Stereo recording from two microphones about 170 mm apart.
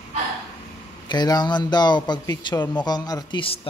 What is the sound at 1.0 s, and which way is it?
Speech, 25° left (ahead or behind).